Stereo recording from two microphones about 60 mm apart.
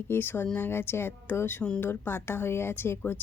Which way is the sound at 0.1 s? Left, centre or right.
Left.